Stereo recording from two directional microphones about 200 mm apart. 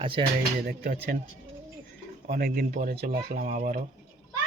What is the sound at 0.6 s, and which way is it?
Speech, 50° right (ahead or behind).